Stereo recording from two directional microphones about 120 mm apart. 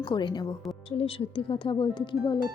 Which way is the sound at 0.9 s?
50° left (ahead or behind).